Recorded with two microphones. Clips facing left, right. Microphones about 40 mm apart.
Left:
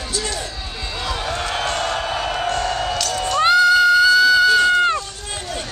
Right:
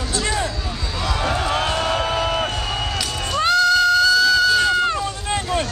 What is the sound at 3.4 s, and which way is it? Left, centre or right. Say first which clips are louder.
Run: left 3 dB; centre.